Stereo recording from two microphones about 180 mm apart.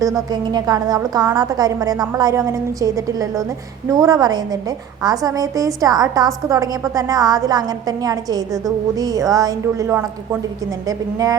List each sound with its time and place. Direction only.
0.0 s a woman's voice: 20° right (ahead or behind)